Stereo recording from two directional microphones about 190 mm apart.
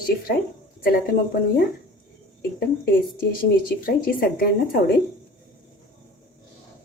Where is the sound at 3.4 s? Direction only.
50° left (ahead or behind).